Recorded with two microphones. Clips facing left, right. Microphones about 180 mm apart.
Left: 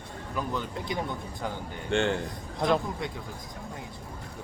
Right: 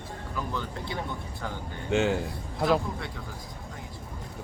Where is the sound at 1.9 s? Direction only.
5° right (ahead or behind).